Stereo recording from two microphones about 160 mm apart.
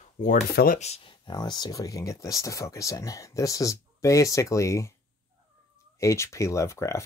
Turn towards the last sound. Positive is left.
turn(degrees=20)  # may be behind; listen again after turning